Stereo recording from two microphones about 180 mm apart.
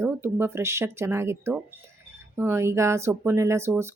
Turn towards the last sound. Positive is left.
turn(degrees=-15)  # may be behind; listen again after turning